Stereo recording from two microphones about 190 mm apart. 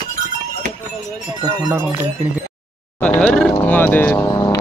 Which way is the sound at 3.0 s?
5° left (ahead or behind).